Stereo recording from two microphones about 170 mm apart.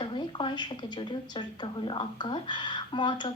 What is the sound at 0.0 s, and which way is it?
Speech, 30° left (ahead or behind).